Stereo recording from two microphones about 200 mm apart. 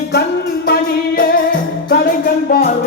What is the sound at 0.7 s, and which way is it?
Music, 45° left (ahead or behind).